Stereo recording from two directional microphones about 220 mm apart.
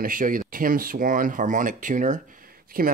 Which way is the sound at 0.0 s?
40° right (ahead or behind).